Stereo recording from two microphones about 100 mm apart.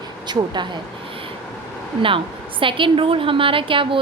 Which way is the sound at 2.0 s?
60° right (ahead or behind).